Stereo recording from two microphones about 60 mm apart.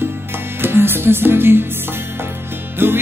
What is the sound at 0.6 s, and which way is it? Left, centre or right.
Music, right.